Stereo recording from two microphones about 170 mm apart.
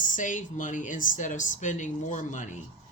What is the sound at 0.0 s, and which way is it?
Speech, 50° left (ahead or behind).